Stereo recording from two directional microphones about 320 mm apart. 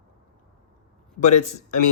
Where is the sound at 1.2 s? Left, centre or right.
Left.